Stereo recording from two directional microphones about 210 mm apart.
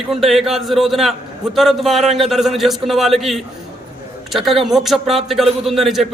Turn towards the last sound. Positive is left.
turn(degrees=0)  # may be behind; listen again after turning